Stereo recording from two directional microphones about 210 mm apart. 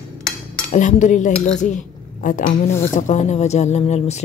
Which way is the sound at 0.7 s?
35° left (ahead or behind).